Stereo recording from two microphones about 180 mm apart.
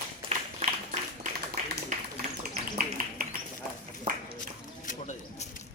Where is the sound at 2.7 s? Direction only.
50° right (ahead or behind).